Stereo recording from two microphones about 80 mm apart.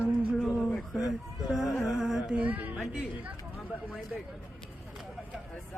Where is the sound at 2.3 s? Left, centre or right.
Right.